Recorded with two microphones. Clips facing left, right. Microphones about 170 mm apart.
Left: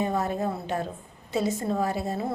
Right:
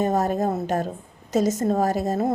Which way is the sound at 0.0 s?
40° right (ahead or behind).